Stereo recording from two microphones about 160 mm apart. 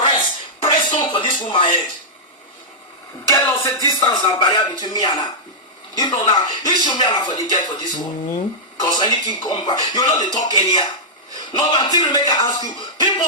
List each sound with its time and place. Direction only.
0.0 s music: 30° left (ahead or behind)
0.8 s speech: 30° left (ahead or behind)
3.2 s a sound: 20° left (ahead or behind)
4.0 s speech: 25° left (ahead or behind)